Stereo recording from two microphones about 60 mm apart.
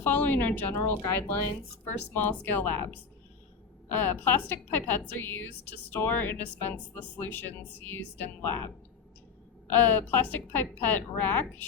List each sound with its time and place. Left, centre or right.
0.0 s a woman's voice: left
2.5 s a woman's voice: left
9.7 s a woman's voice: left